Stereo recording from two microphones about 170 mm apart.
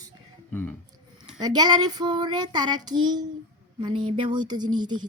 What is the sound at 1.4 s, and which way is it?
Child singing, 25° right (ahead or behind).